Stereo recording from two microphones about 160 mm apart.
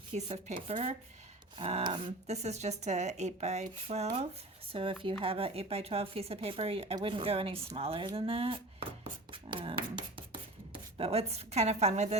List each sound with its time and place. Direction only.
0.1 s speech: 45° right (ahead or behind)